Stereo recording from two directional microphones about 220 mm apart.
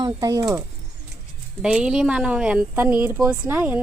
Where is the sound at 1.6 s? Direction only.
5° right (ahead or behind).